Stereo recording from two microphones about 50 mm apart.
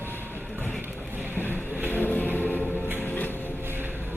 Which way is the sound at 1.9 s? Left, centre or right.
Left.